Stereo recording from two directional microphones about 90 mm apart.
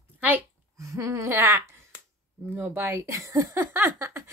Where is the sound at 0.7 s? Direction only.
35° right (ahead or behind).